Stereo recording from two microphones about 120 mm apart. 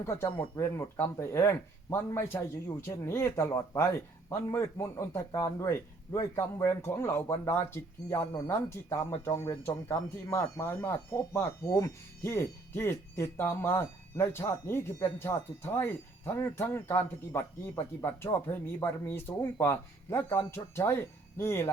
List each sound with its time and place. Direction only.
0.0 s speech: 20° left (ahead or behind)